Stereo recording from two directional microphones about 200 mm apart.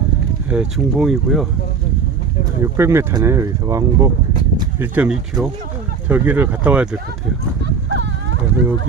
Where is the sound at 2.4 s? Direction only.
15° right (ahead or behind).